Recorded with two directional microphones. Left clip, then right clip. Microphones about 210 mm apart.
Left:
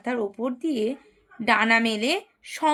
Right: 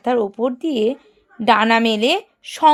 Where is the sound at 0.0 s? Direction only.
40° right (ahead or behind).